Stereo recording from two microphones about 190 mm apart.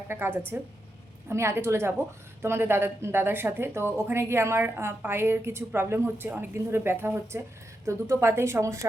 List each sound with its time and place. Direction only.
0.1 s a woman's voice: 10° right (ahead or behind)